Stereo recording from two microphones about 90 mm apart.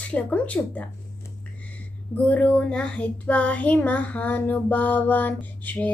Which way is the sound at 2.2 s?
15° left (ahead or behind).